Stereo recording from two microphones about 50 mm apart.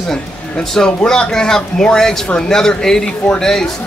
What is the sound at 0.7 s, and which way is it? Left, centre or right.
Speech, centre.